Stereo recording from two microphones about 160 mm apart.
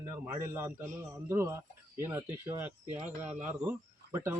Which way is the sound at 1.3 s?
15° right (ahead or behind).